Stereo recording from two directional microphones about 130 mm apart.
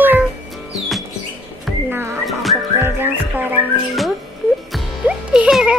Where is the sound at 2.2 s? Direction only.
Centre (ahead or behind).